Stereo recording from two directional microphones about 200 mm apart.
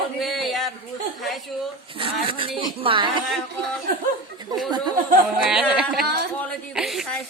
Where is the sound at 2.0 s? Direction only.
25° right (ahead or behind).